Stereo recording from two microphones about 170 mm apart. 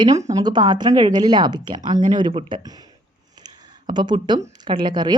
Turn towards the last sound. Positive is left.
turn(degrees=-25)  # may be behind; listen again after turning